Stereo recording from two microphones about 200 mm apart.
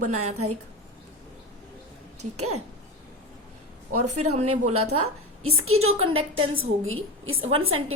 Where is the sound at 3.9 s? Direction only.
90° right.